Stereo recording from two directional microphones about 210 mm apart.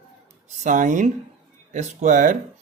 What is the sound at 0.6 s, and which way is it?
Speech, 40° right (ahead or behind).